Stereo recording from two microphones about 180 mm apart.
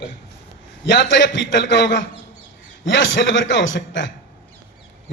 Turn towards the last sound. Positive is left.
turn(degrees=90)